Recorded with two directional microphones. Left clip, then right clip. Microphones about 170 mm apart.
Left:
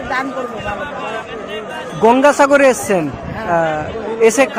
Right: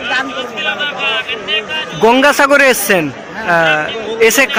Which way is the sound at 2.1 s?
Centre (ahead or behind).